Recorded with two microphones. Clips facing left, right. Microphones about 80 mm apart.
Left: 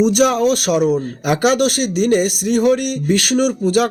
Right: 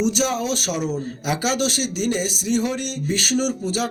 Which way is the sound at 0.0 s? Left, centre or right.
Left.